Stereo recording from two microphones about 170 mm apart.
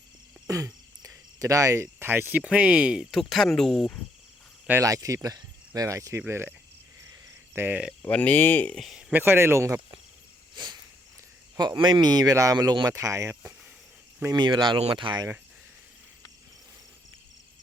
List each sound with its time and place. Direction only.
0.4 s speech: 20° right (ahead or behind); by 3.9 s centre (ahead or behind)
4.6 s speech: 15° right (ahead or behind)
7.5 s speech: 10° right (ahead or behind)
8.0 s speech: 10° left (ahead or behind); by 9.8 s 15° right (ahead or behind)
10.5 s cricket: 25° right (ahead or behind)
11.5 s speech: 25° right (ahead or behind)